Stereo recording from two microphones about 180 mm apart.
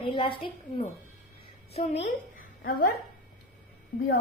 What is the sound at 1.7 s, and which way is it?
Speech, 35° left (ahead or behind).